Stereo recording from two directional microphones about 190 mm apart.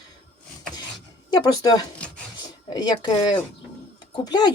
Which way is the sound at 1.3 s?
20° left (ahead or behind).